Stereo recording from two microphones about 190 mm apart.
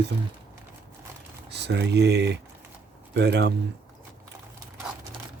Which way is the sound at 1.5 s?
65° right (ahead or behind).